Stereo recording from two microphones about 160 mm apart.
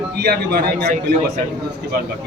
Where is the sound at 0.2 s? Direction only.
80° right.